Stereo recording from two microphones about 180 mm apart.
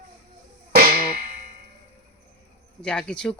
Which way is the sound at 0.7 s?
55° right (ahead or behind).